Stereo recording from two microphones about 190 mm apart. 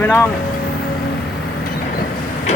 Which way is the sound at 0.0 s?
10° left (ahead or behind).